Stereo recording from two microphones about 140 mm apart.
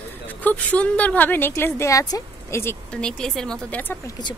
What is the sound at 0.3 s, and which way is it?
A woman's voice, 10° left (ahead or behind).